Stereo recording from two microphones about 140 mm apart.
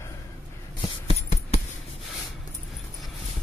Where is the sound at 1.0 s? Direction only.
50° left (ahead or behind).